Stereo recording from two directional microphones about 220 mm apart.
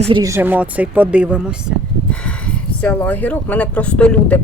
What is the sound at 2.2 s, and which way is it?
Speech, 5° left (ahead or behind).